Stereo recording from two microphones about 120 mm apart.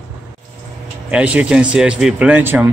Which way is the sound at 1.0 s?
10° right (ahead or behind).